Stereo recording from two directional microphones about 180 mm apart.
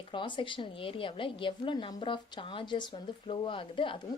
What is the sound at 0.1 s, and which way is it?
A woman's voice, 25° left (ahead or behind).